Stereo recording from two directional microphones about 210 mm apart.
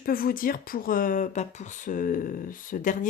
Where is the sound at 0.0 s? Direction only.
45° left (ahead or behind).